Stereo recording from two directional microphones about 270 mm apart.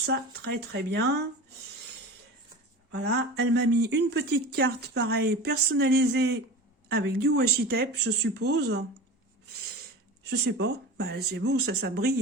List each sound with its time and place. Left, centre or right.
0.0 s speech: right
2.9 s speech: right
10.2 s speech: right